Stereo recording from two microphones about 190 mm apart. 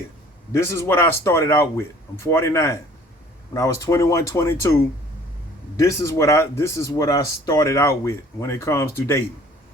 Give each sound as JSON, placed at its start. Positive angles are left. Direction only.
{"t": 0.5, "sound": "speech", "side_deg": 15}
{"t": 5.7, "sound": "speech", "side_deg": 15}